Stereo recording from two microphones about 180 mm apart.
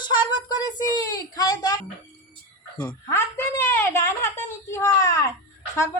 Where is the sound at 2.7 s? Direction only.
20° left (ahead or behind).